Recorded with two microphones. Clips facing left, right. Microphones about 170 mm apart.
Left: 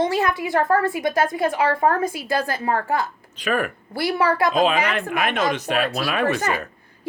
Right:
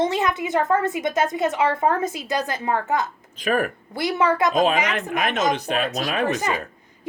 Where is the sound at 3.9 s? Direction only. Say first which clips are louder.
Even; 20° right (ahead or behind).